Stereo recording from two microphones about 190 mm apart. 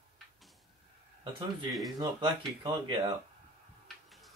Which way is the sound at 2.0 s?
20° right (ahead or behind).